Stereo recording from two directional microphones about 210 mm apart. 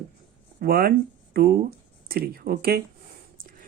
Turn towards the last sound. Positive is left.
turn(degrees=-45)  # may be behind; listen again after turning